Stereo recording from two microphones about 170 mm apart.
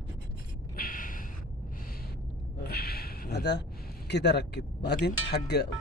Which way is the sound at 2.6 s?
65° left (ahead or behind).